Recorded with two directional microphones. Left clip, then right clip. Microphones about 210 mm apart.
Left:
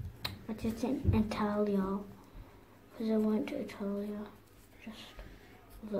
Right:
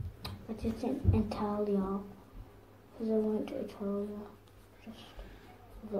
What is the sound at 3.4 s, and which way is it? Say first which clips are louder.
Speech: even; 25° left (ahead or behind).